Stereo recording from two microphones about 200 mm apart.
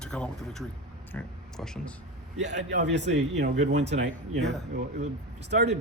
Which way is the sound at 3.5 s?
35° right (ahead or behind).